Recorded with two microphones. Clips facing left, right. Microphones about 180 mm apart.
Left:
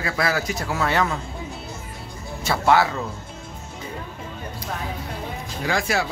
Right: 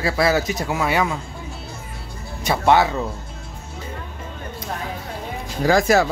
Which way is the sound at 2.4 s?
20° right (ahead or behind).